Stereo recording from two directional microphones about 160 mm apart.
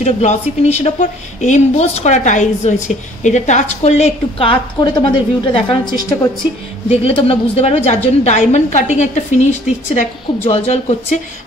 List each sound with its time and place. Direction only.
0.0 s a woman's voice: 45° left (ahead or behind); by 6.1 s 25° left (ahead or behind)
6.9 s a woman's voice: 40° left (ahead or behind)